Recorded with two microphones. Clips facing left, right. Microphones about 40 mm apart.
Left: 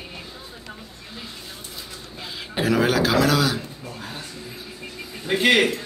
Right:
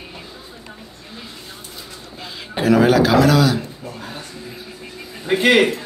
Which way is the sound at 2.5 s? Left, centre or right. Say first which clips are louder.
Right 6 dB; centre.